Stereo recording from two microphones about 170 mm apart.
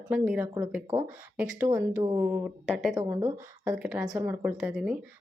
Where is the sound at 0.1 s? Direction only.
10° right (ahead or behind).